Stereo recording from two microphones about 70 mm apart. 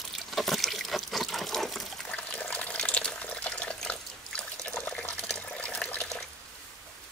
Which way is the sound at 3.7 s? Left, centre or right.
Centre.